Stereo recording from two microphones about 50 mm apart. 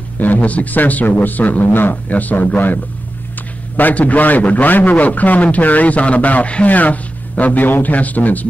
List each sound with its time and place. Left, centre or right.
0.2 s a man's voice: left